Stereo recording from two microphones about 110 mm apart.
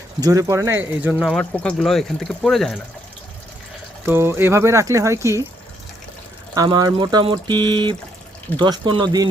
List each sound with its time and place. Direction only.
0.2 s speech: 30° right (ahead or behind)
1.3 s speech: 10° left (ahead or behind)
4.0 s speech: 20° right (ahead or behind)
6.5 s speech: 35° right (ahead or behind)